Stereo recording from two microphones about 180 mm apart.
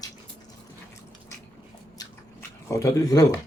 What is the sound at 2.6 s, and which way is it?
Speech, 15° left (ahead or behind).